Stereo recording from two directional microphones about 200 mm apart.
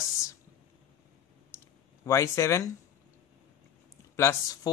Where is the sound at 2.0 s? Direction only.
15° left (ahead or behind).